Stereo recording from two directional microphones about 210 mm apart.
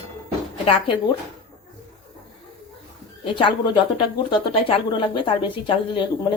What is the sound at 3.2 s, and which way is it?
Speech, 25° left (ahead or behind).